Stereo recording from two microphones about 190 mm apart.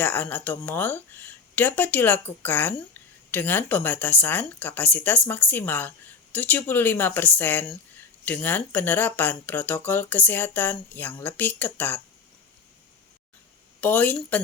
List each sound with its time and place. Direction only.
0.0 s speech: 10° left (ahead or behind)
13.8 s speech: 10° left (ahead or behind)